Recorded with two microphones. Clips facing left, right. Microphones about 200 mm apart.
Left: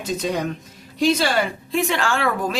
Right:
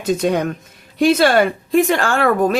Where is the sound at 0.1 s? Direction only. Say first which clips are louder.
Right 7 dB; 55° right (ahead or behind).